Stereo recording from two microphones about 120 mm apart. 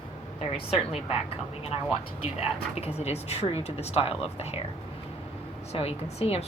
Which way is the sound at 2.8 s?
60° left (ahead or behind).